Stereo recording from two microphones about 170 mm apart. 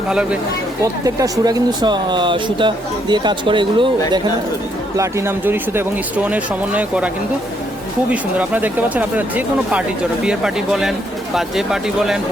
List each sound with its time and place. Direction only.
0.1 s speech: 5° right (ahead or behind)
0.8 s speech: 20° right (ahead or behind)
4.9 s speech: 15° right (ahead or behind)
8.1 s speech: 10° right (ahead or behind)